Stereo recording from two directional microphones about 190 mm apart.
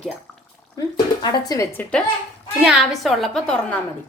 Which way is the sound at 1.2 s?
20° left (ahead or behind).